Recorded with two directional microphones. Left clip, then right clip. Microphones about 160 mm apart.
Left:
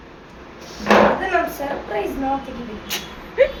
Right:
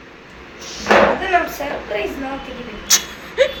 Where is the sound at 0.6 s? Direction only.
20° left (ahead or behind).